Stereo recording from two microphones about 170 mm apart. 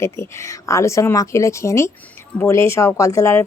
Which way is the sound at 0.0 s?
15° left (ahead or behind).